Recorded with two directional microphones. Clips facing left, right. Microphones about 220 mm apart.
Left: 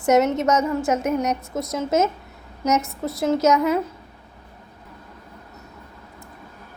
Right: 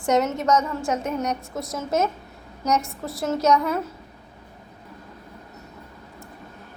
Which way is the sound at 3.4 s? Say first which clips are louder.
Left 1 dB; 20° left (ahead or behind).